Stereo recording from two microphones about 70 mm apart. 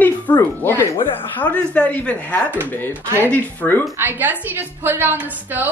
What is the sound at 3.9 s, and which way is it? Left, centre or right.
A woman's voice, right.